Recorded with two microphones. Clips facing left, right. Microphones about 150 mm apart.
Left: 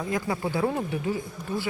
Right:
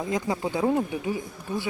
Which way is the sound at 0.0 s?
20° right (ahead or behind).